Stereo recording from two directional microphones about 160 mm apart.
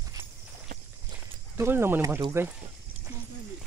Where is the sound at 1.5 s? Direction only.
15° right (ahead or behind).